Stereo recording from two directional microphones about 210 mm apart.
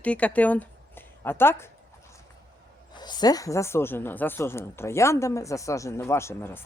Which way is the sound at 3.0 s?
20° left (ahead or behind).